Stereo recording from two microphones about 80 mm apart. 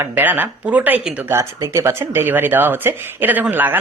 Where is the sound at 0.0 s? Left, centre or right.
Right.